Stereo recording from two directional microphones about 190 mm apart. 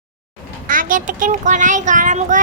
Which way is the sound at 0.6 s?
45° right (ahead or behind).